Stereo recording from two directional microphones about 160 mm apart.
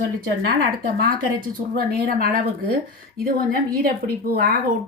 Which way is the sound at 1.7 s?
65° right (ahead or behind).